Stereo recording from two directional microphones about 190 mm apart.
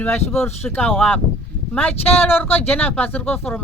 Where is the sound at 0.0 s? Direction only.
10° left (ahead or behind).